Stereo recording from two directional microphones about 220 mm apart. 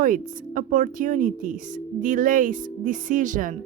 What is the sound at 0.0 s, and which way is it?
A woman's voice, 40° right (ahead or behind).